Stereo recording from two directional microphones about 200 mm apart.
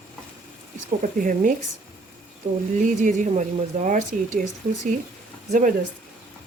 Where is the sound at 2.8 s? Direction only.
40° right (ahead or behind).